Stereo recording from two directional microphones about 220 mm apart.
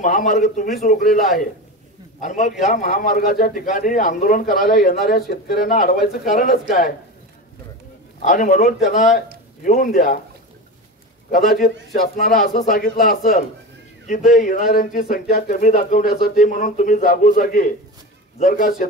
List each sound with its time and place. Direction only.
0.0 s a man's voice: 35° left (ahead or behind)
1.1 s a man's voice: centre (ahead or behind)
2.1 s a man's voice: 35° left (ahead or behind)
8.2 s a man's voice: 35° left (ahead or behind)
11.3 s a man's voice: 40° left (ahead or behind)